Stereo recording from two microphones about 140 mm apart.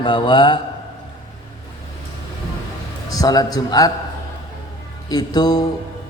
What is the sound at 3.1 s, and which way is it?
Speech, 25° left (ahead or behind).